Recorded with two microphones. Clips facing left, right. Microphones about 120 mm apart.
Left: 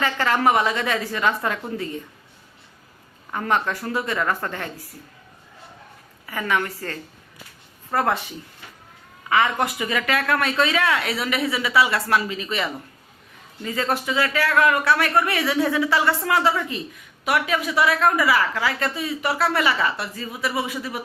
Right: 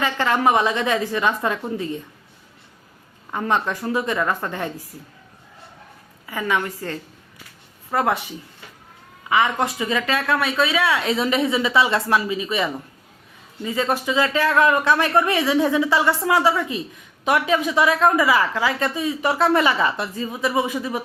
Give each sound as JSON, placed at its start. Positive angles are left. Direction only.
{"t": 0.0, "sound": "a woman's voice", "side_deg": -20}
{"t": 3.3, "sound": "a man's voice", "side_deg": -20}
{"t": 6.2, "sound": "a man's voice", "side_deg": -15}
{"t": 9.3, "sound": "a man's voice", "side_deg": -15}
{"t": 17.2, "sound": "a woman's voice", "side_deg": -25}